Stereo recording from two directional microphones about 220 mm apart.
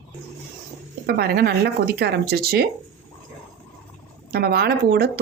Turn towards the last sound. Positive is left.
turn(degrees=-45)  # may be behind; listen again after turning